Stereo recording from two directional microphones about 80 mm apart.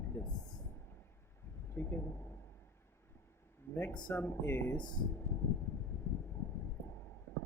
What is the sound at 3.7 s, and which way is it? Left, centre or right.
Speech, left.